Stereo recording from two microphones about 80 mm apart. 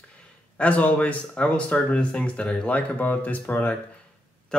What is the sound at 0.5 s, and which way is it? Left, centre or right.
Speech, centre.